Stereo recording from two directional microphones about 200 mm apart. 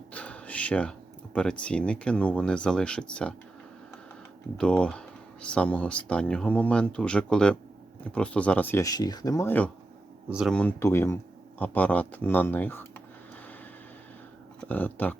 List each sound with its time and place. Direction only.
0.1 s speech: 5° left (ahead or behind)
4.5 s speech: 5° left (ahead or behind)
10.2 s speech: 5° right (ahead or behind)
14.7 s speech: 10° left (ahead or behind)